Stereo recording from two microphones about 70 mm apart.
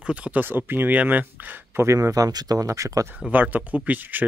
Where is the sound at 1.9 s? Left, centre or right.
Right.